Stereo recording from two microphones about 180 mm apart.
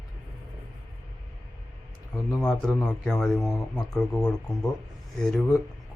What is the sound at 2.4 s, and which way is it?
Speech, 5° left (ahead or behind).